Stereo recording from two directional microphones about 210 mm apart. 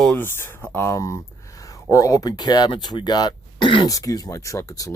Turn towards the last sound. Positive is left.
turn(degrees=15)  # may be behind; listen again after turning